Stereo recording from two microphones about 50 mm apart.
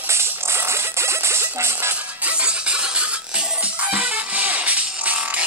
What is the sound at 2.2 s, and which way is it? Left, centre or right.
Music, right.